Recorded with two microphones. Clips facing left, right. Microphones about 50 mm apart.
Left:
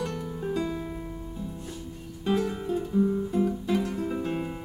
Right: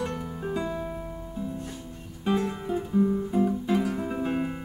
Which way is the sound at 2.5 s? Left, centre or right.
Centre.